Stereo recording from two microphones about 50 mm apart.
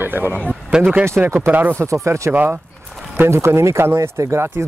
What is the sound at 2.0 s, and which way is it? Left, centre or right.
Speech, right.